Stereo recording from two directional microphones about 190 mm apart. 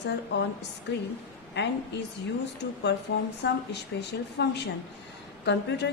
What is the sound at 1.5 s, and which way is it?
A woman's voice, 65° left (ahead or behind).